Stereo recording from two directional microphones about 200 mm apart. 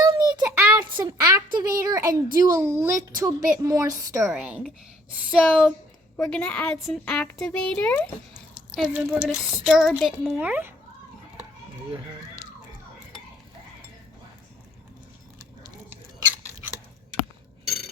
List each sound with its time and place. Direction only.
0.0 s child singing: 20° right (ahead or behind)
1.5 s a woman's voice: 15° right (ahead or behind)
4.3 s speech: 5° right (ahead or behind)
8.5 s a sound: 5° right (ahead or behind)
9.3 s speech: centre (ahead or behind)